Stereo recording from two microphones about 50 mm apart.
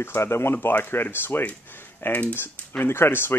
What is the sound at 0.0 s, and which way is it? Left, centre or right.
Speech, left.